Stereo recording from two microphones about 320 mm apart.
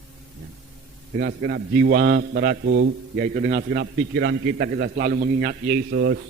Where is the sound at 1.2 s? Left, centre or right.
Right.